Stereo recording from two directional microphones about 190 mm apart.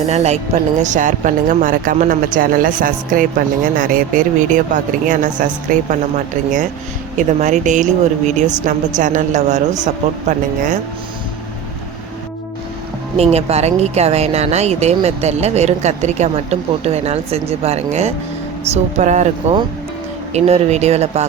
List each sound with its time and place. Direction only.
0.1 s speech: 35° right (ahead or behind)
13.1 s speech: 35° right (ahead or behind)